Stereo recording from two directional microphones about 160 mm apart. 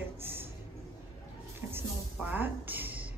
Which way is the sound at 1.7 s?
10° right (ahead or behind).